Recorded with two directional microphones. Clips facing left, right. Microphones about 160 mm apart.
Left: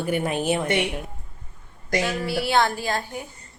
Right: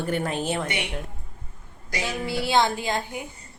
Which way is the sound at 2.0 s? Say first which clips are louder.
Left 2 dB; 20° right (ahead or behind).